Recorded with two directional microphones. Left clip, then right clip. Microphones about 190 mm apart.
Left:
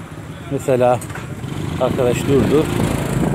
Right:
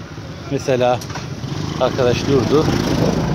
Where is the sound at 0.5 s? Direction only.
15° left (ahead or behind).